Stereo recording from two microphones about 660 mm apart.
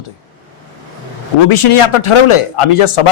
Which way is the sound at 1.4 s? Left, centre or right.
Left.